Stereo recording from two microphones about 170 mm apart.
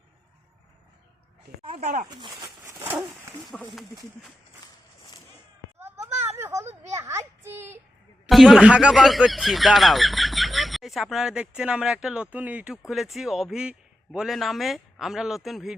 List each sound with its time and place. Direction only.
1.6 s speech: 40° right (ahead or behind)
2.0 s speech: 25° right (ahead or behind)
2.8 s speech: 10° right (ahead or behind)
3.4 s speech: centre (ahead or behind)
5.8 s a sound: 15° right (ahead or behind)
6.3 s children playing: 15° right (ahead or behind)
6.9 s a sound: 15° right (ahead or behind)
8.3 s speech: 5° right (ahead or behind)